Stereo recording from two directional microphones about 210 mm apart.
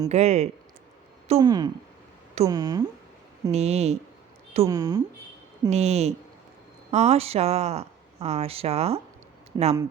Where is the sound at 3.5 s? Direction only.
30° right (ahead or behind).